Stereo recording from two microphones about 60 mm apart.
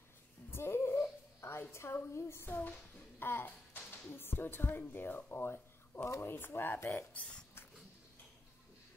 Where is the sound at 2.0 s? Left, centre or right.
Left.